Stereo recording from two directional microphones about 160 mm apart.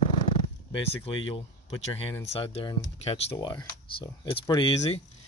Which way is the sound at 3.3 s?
25° left (ahead or behind).